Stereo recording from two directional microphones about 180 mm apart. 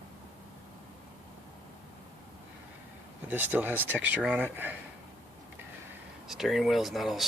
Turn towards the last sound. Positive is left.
turn(degrees=0)  # may be behind; listen again after turning